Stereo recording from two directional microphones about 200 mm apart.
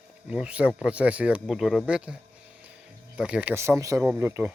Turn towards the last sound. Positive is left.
turn(degrees=-10)  # may be behind; listen again after turning